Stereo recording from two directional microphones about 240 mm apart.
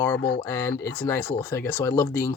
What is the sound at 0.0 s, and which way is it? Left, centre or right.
Speech, centre.